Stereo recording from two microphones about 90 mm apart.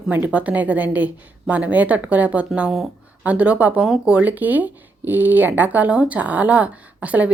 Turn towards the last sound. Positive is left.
turn(degrees=-15)  # may be behind; listen again after turning